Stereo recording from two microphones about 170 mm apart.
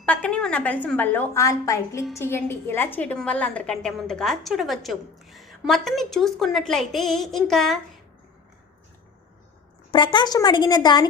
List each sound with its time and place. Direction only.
0.0 s a woman's voice: 5° left (ahead or behind)
9.9 s a woman's voice: 30° left (ahead or behind)